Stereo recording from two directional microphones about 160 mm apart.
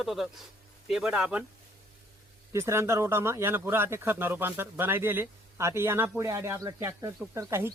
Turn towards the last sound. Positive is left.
turn(degrees=-15)  # may be behind; listen again after turning